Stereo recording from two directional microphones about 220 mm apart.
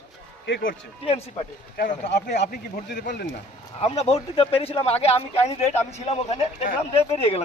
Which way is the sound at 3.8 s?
30° left (ahead or behind).